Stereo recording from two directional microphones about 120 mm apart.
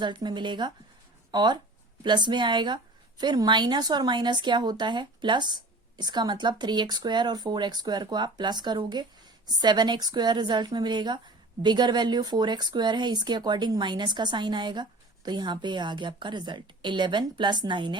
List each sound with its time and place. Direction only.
0.0 s a woman's voice: 40° right (ahead or behind)